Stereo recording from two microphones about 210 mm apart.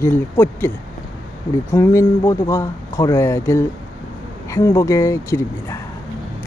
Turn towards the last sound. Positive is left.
turn(degrees=15)  # may be behind; listen again after turning